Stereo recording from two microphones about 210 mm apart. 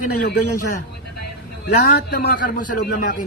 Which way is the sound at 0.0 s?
40° left (ahead or behind).